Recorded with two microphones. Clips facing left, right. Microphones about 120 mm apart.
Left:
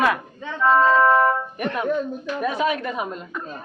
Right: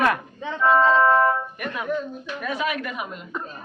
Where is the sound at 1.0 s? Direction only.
10° left (ahead or behind).